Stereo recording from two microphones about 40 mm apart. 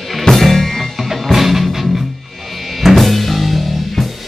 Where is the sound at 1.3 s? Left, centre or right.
Centre.